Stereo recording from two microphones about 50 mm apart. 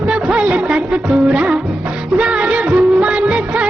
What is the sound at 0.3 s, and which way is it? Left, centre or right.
Music, right.